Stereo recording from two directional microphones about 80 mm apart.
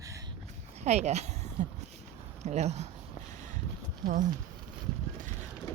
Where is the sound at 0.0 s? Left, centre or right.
Right.